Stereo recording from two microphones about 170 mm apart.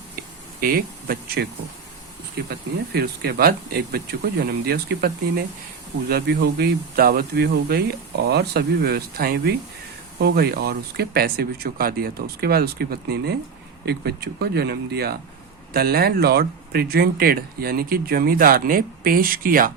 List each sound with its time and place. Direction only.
0.6 s speech: 60° right (ahead or behind)
2.5 s speech: 70° right (ahead or behind)